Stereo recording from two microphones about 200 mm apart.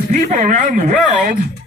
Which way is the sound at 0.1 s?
35° right (ahead or behind).